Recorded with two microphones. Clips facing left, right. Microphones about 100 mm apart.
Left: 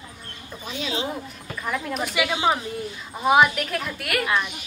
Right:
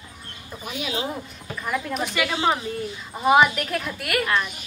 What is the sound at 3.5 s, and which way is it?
A woman's voice, centre (ahead or behind).